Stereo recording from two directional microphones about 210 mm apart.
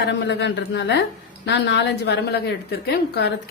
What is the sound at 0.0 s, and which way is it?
A woman's voice, 55° left (ahead or behind).